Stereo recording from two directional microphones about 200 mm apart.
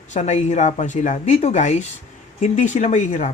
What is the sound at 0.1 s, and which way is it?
Speech, 35° left (ahead or behind).